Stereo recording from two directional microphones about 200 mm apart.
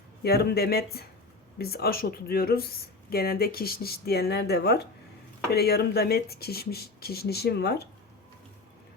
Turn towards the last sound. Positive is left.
turn(degrees=55)  # may be behind; listen again after turning